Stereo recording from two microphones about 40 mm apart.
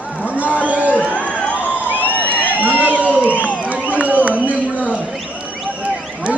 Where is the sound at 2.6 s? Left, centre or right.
Right.